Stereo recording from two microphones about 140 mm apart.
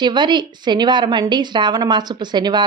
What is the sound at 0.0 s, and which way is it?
Speech, 30° right (ahead or behind).